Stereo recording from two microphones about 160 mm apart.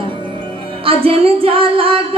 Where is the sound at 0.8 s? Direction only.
35° right (ahead or behind).